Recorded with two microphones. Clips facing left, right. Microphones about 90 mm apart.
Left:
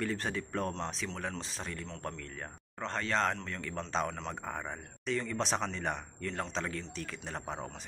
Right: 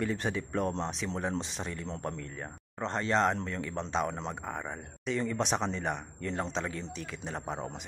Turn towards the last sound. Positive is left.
turn(degrees=-10)  # may be behind; listen again after turning